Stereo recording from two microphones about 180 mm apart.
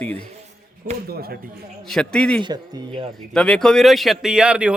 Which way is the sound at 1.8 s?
5° left (ahead or behind).